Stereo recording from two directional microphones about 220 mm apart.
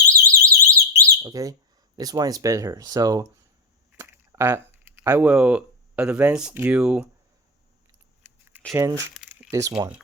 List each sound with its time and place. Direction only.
0.3 s alarm: 10° right (ahead or behind)
2.0 s speech: 15° right (ahead or behind)
8.7 s speech: 15° right (ahead or behind)
9.1 s crumpling: 5° right (ahead or behind)
9.5 s speech: 15° right (ahead or behind)